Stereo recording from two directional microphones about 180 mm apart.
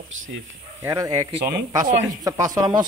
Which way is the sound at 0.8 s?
15° right (ahead or behind).